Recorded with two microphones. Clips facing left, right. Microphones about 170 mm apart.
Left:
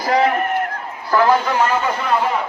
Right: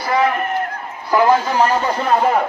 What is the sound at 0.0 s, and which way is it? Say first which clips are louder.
Speech: left 1 dB; 40° left (ahead or behind).